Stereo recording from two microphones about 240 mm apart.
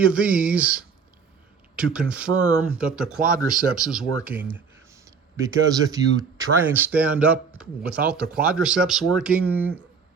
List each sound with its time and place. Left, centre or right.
0.0 s speech: centre
3.2 s speech: right
3.8 s speech: centre